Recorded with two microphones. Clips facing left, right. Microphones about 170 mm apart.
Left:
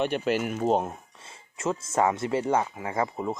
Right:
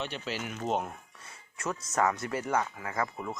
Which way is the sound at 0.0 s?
55° left (ahead or behind).